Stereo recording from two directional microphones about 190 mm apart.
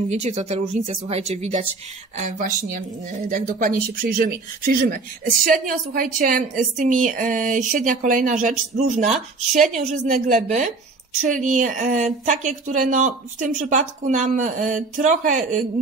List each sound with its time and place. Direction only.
0.1 s a woman's voice: 35° right (ahead or behind)